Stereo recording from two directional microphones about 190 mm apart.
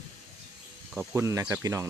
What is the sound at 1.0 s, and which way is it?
Speech, 15° right (ahead or behind).